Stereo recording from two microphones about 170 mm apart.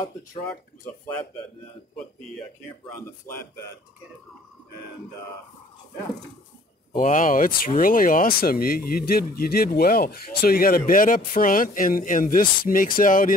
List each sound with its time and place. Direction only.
3.3 s speech: 15° left (ahead or behind)
7.0 s speech: 50° left (ahead or behind)